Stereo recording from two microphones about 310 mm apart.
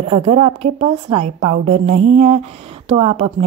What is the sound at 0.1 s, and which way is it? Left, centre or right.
A woman's voice, centre.